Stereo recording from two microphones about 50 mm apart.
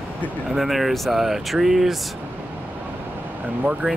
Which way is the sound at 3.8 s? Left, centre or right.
Right.